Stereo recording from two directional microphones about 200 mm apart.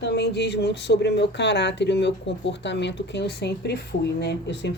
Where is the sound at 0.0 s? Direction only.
55° left (ahead or behind).